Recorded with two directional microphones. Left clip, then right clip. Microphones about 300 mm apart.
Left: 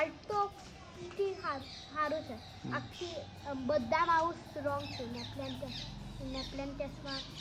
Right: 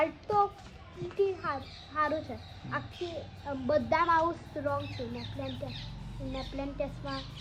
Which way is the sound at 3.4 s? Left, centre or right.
Centre.